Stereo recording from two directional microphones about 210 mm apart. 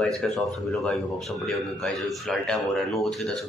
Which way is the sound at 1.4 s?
Centre (ahead or behind).